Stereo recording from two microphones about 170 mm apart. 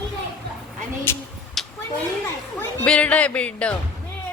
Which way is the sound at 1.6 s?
Centre (ahead or behind).